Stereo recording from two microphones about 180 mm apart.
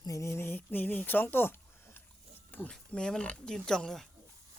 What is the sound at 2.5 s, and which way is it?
Speech, 10° left (ahead or behind).